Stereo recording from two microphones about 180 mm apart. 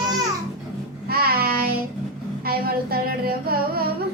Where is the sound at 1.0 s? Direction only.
60° right (ahead or behind).